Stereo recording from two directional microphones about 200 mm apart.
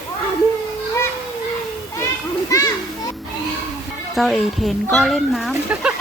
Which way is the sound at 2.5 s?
15° left (ahead or behind).